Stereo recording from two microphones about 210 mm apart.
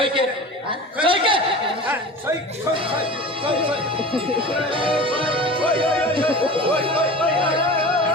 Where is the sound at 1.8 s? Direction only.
5° right (ahead or behind).